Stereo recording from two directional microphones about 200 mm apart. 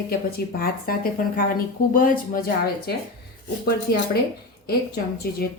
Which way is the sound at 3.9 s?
50° left (ahead or behind).